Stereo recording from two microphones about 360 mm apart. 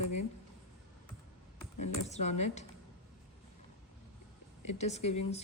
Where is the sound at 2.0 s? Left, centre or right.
Centre.